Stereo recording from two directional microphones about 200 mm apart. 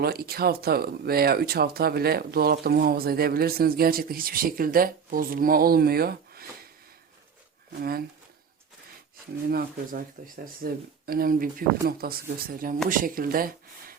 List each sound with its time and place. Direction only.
0.0 s speech: 50° right (ahead or behind)
7.8 s speech: 50° right (ahead or behind)
9.5 s speech: 45° right (ahead or behind)